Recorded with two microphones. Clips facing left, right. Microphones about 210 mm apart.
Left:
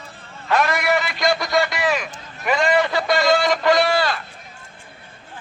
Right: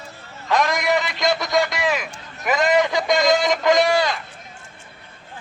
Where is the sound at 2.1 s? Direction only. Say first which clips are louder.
Left 1 dB; 5° right (ahead or behind).